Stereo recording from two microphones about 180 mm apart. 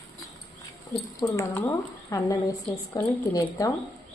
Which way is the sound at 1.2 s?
15° left (ahead or behind).